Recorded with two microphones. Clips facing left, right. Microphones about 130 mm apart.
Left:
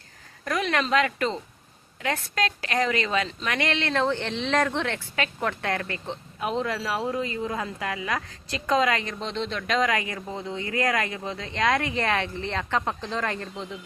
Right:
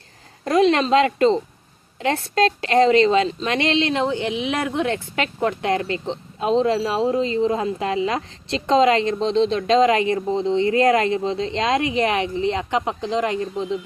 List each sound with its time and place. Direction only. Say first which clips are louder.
0.4 s speech: right 9 dB; 25° right (ahead or behind)